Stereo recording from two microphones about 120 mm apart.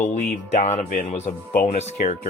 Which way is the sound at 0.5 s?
65° left (ahead or behind).